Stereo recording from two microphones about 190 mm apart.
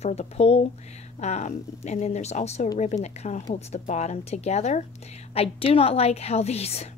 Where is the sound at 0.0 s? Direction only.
35° left (ahead or behind).